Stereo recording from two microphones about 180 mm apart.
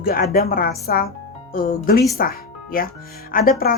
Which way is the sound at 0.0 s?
55° left (ahead or behind).